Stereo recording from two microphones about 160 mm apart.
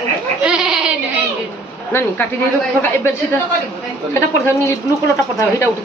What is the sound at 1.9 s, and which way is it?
Speech, 15° left (ahead or behind).